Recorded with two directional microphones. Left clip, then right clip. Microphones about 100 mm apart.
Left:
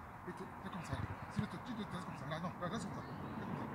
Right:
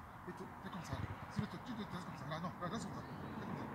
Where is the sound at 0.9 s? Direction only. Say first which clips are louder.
Left 2 dB; 55° right (ahead or behind).